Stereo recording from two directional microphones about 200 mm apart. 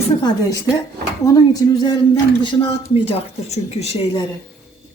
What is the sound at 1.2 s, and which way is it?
A woman's voice, 15° left (ahead or behind).